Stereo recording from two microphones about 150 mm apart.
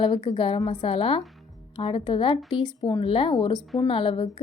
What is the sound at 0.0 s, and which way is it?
A woman's voice, 40° left (ahead or behind).